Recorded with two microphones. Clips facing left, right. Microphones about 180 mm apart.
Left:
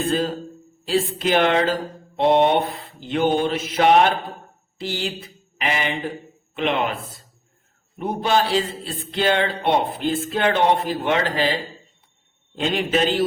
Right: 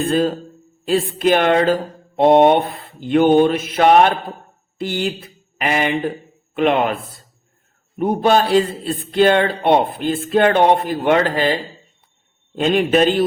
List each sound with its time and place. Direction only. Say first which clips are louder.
0.0 s a man's voice: right 5 dB; 55° right (ahead or behind)
4.8 s mantra: right 5 dB; 55° right (ahead or behind)
6.6 s a man's voice: right 6 dB; 50° right (ahead or behind)